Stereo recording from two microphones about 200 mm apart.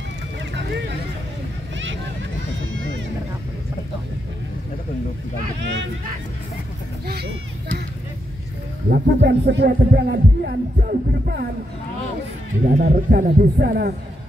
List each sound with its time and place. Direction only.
8.9 s music: 60° right (ahead or behind)
12.6 s music: 40° right (ahead or behind)